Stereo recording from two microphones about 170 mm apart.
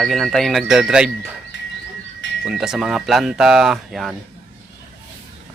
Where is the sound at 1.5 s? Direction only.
90° left.